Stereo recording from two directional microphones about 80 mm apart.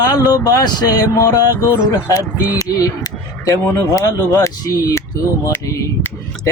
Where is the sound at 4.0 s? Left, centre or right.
Left.